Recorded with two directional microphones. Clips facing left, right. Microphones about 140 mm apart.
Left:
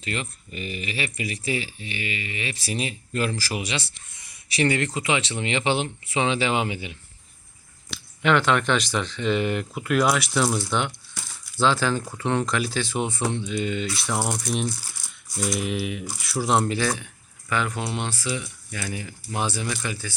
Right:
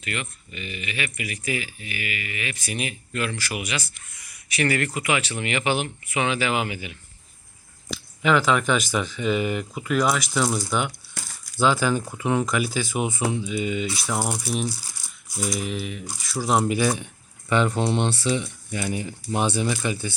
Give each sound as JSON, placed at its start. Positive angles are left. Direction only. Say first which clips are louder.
{"t": 0.0, "sound": "speech", "louder": "left 1 dB", "side_deg": 30}
{"t": 7.9, "sound": "speech", "louder": "even", "side_deg": 0}
{"t": 16.4, "sound": "speech", "louder": "right 1 dB", "side_deg": -5}
{"t": 17.5, "sound": "speech", "louder": "right 5 dB", "side_deg": -25}